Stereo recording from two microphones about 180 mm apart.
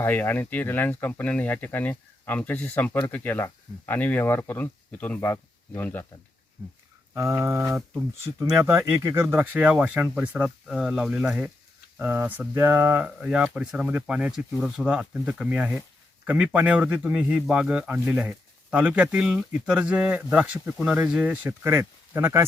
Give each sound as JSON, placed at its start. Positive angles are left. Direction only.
{"t": 0.0, "sound": "speech", "side_deg": 10}
{"t": 7.1, "sound": "speech", "side_deg": -15}